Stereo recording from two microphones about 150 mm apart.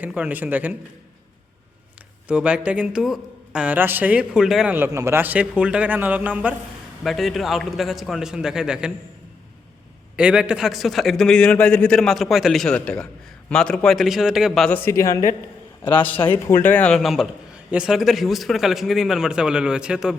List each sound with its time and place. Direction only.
0.0 s a man's voice: 10° right (ahead or behind)
2.2 s a man's voice: 10° right (ahead or behind)
4.9 s a man's voice: 20° right (ahead or behind); by 8.9 s 5° right (ahead or behind)
10.2 s a man's voice: 5° right (ahead or behind)
14.8 s a man's voice: 20° left (ahead or behind); by 20.1 s 5° right (ahead or behind)